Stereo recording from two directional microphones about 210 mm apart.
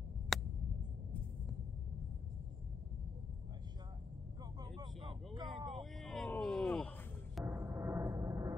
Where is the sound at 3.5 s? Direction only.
20° right (ahead or behind).